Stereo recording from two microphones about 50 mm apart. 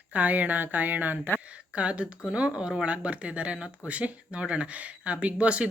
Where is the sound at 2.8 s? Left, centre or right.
Right.